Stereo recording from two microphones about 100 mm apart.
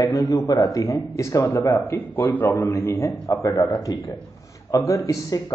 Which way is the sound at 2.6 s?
30° left (ahead or behind).